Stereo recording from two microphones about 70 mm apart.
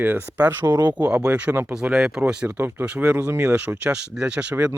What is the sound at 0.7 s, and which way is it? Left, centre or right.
Speech, right.